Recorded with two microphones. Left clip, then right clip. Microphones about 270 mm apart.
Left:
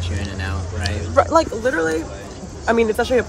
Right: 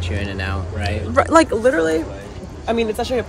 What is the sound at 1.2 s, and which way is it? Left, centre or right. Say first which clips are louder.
Speech: right 2 dB; right.